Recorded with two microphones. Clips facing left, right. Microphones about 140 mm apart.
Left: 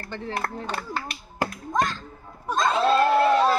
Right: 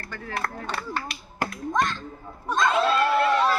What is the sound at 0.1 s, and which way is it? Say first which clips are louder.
Speech: left 2 dB; 25° left (ahead or behind).